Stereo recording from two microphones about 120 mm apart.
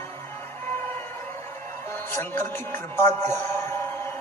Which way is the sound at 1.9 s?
15° left (ahead or behind).